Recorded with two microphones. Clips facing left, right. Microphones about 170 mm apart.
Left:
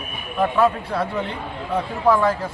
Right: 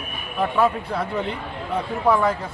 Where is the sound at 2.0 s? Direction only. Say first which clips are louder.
Left 2 dB; centre (ahead or behind).